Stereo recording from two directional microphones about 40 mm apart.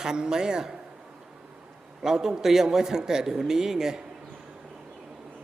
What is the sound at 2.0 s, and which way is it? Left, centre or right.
A man's voice, centre.